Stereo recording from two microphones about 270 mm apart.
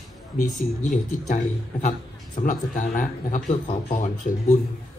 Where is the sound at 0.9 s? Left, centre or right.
Left.